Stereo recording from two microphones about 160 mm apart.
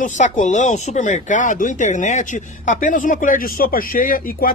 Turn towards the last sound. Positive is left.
turn(degrees=60)  # may be behind; listen again after turning